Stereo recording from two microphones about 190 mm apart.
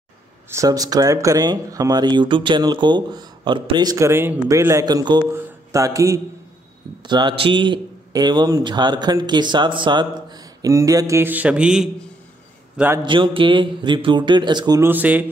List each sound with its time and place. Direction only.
0.5 s a man's voice: 15° right (ahead or behind)
5.7 s mantra: 15° right (ahead or behind)
7.0 s a man's voice: 25° right (ahead or behind)
13.0 s a man's voice: 25° right (ahead or behind); by 15.2 s 10° right (ahead or behind)